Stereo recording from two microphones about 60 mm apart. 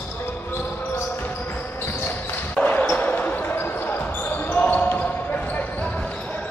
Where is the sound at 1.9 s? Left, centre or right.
Left.